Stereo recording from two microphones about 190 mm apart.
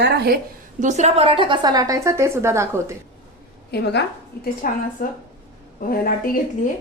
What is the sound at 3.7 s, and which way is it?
Speech, 60° left (ahead or behind).